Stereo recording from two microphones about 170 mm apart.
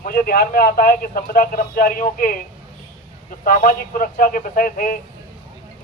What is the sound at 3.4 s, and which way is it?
A man's voice, 55° left (ahead or behind).